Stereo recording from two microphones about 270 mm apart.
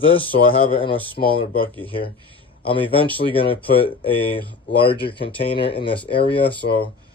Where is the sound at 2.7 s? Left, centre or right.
Centre.